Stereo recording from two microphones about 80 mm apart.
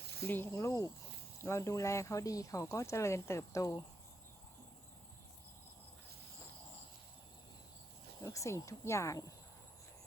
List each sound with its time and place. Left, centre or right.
0.3 s speech: left
0.5 s speech: left
8.2 s speech: left